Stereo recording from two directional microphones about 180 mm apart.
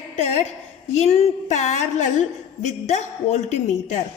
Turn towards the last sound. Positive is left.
turn(degrees=40)  # may be behind; listen again after turning